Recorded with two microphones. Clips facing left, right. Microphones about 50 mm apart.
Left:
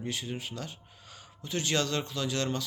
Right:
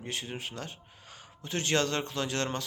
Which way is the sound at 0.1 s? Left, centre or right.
Right.